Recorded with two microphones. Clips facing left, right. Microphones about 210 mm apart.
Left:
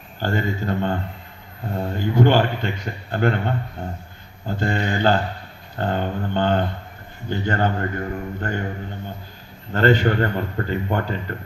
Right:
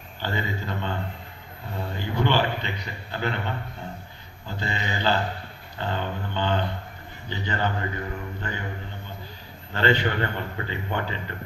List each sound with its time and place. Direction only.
0.2 s a man's voice: 45° left (ahead or behind)
9.7 s a man's voice: 45° left (ahead or behind)